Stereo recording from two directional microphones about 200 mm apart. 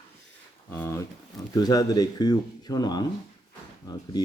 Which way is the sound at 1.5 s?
20° left (ahead or behind).